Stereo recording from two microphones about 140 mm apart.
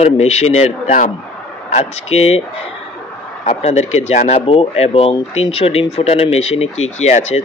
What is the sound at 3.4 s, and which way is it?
Speech, 55° left (ahead or behind).